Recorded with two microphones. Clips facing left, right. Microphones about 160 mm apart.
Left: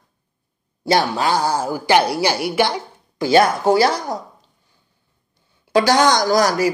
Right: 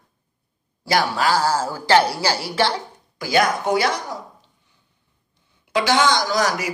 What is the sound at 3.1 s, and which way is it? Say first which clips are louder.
Speech: left 5 dB; 30° left (ahead or behind).